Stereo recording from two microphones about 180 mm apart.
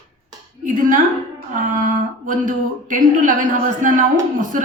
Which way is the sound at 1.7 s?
45° right (ahead or behind).